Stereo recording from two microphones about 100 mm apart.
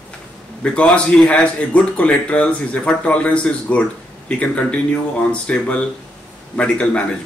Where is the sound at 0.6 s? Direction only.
10° left (ahead or behind).